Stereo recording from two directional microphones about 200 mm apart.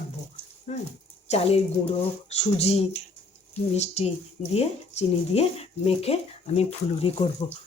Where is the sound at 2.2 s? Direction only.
30° left (ahead or behind).